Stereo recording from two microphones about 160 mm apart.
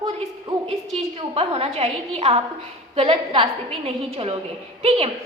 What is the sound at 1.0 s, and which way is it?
A woman's voice, 40° right (ahead or behind).